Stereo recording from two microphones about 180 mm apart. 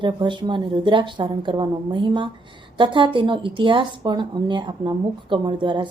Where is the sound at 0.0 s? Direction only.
25° right (ahead or behind).